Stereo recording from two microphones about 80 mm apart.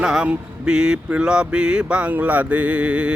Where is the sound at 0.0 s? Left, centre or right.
Centre.